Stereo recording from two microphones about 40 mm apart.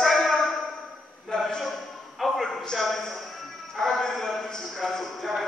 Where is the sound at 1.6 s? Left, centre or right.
Centre.